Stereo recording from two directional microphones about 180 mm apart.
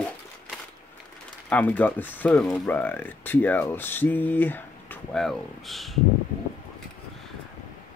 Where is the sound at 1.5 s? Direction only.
10° left (ahead or behind).